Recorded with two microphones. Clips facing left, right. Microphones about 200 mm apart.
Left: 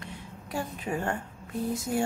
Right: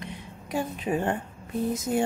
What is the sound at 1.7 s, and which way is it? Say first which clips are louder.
Speech: right 2 dB; 20° right (ahead or behind).